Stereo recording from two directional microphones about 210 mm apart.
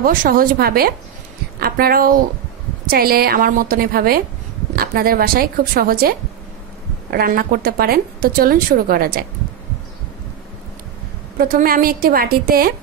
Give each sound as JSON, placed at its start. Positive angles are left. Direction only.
{"t": 0.0, "sound": "a woman's voice", "side_deg": -40}
{"t": 11.3, "sound": "a woman's voice", "side_deg": -45}